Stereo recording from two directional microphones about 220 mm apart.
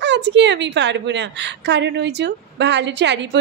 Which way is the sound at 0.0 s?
50° right (ahead or behind).